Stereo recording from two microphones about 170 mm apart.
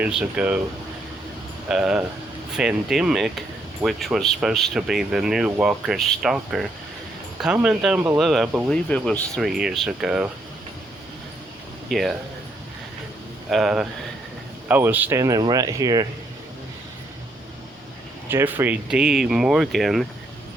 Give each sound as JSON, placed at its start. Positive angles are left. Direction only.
{"t": 0.0, "sound": "speech", "side_deg": -5}
{"t": 1.6, "sound": "speech", "side_deg": -5}
{"t": 11.9, "sound": "speech", "side_deg": 0}
{"t": 13.5, "sound": "speech", "side_deg": 0}
{"t": 18.3, "sound": "speech", "side_deg": -10}